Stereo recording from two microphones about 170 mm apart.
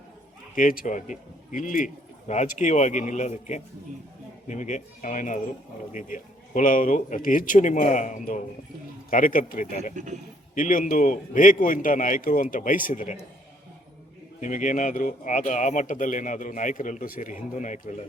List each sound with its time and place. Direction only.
0.5 s a man's voice: 55° left (ahead or behind)
9.9 s a man's voice: 45° right (ahead or behind)
10.5 s speech: 50° left (ahead or behind)
14.4 s speech: 45° left (ahead or behind)